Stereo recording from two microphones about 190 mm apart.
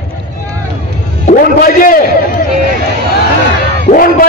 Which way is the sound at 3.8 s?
50° left (ahead or behind).